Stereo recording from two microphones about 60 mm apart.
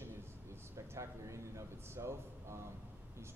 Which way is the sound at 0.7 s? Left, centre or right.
Right.